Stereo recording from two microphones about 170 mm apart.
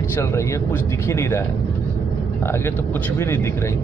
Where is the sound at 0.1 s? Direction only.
15° left (ahead or behind).